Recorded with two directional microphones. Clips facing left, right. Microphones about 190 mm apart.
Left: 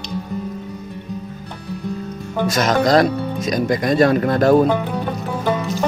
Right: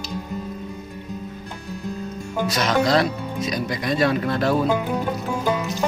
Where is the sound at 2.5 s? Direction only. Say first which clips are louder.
Left 4 dB; 45° left (ahead or behind).